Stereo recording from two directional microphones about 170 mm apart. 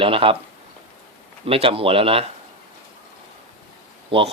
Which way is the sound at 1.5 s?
35° right (ahead or behind).